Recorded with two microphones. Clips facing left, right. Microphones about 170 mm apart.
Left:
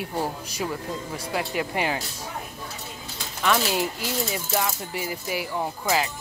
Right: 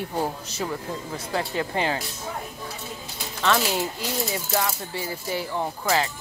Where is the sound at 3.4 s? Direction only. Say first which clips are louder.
Even; 15° left (ahead or behind).